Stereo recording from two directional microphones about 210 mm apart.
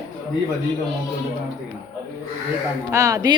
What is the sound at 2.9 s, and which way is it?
Speech, 15° right (ahead or behind).